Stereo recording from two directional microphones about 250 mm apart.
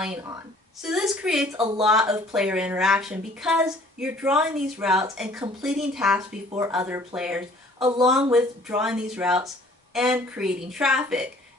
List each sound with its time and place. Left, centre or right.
0.0 s a woman's voice: centre